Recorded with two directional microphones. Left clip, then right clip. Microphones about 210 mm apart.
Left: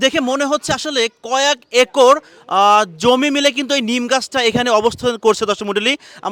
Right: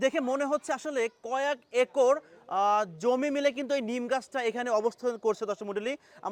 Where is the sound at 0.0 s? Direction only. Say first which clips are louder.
Left 12 dB; 35° left (ahead or behind).